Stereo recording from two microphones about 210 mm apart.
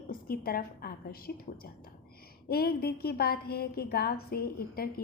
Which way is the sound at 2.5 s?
45° left (ahead or behind).